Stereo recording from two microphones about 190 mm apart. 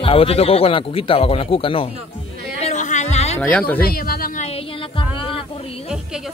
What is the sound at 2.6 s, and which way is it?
Music, 40° left (ahead or behind).